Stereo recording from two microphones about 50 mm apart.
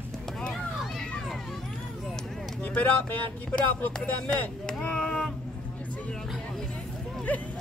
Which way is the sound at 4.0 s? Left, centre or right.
Centre.